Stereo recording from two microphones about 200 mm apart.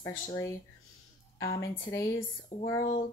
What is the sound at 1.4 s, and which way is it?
Speech, 20° left (ahead or behind).